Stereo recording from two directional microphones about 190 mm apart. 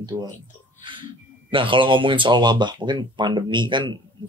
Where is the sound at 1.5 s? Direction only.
25° right (ahead or behind).